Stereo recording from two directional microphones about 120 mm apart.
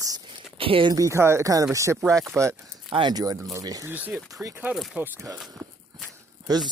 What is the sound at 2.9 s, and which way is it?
Speech, 40° right (ahead or behind).